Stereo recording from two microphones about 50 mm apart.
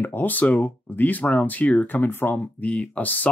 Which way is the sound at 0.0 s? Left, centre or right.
Left.